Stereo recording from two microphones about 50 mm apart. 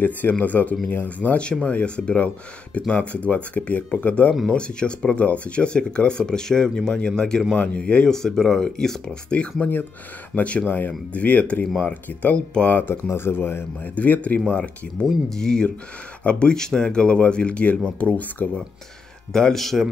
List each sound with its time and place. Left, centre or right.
0.0 s speech: left; by 8.2 s centre
8.2 s speech: centre; by 12.9 s left
13.1 s speech: left
13.8 s speech: left
15.2 s speech: centre; by 18.6 s left
19.3 s speech: centre